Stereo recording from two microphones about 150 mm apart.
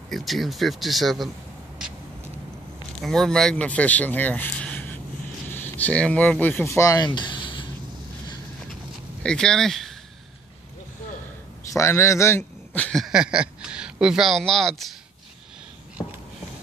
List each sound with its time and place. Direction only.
0.1 s speech: centre (ahead or behind)
3.0 s speech: centre (ahead or behind); by 7.1 s 20° left (ahead or behind)
7.2 s a sound: 30° left (ahead or behind)
9.2 s speech: 5° left (ahead or behind)
11.7 s speech: 20° left (ahead or behind)
13.0 s speech: 5° right (ahead or behind)